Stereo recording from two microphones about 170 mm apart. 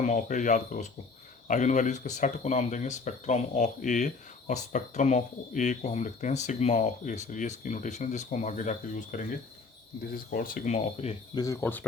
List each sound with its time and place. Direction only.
0.0 s speech: 45° left (ahead or behind)
11.3 s speech: 15° left (ahead or behind)